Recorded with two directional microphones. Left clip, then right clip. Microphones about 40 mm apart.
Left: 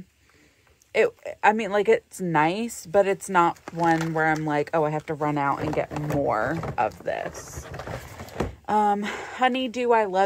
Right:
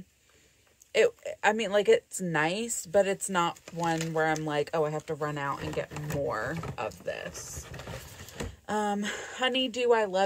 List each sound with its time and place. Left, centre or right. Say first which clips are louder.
0.9 s speech: left 3 dB; left
4.5 s speech: left 5 dB; centre
4.8 s speech: left 6 dB; left
5.2 s speech: left 11 dB; left
6.2 s speech: left 7 dB; left
8.6 s speech: left 8 dB; left
9.5 s speech: even; centre